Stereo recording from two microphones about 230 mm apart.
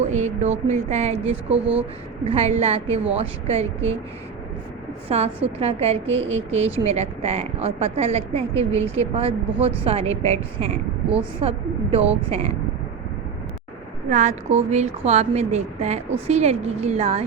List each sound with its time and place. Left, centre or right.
0.0 s a woman's voice: right
5.0 s a woman's voice: right
14.1 s a woman's voice: right